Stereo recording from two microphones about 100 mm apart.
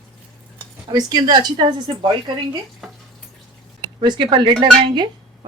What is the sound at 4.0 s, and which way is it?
A woman's voice, 50° right (ahead or behind).